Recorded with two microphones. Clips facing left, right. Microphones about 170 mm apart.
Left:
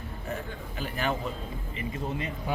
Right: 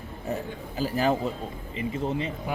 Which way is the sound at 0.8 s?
35° right (ahead or behind).